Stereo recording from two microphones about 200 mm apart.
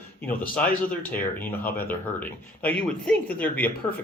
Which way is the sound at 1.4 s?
10° left (ahead or behind).